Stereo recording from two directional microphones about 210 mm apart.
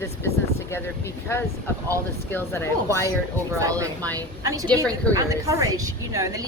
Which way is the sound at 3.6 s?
15° right (ahead or behind).